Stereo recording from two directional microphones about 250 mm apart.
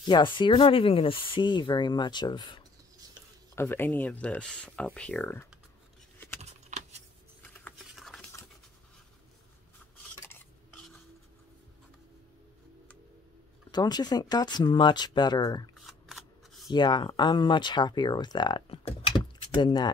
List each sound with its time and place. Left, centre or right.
0.1 s speech: centre
6.4 s keys jangling: right
7.6 s a sound: centre
13.7 s speech: centre
15.7 s shuffling cards: centre
16.7 s speech: centre